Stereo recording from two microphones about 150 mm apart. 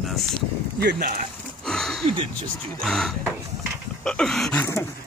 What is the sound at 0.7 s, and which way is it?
Speech, 85° right.